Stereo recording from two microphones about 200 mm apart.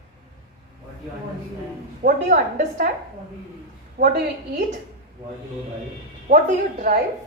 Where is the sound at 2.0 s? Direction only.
45° right (ahead or behind).